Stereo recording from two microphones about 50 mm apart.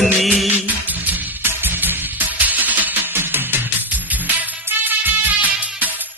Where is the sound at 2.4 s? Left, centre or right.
Right.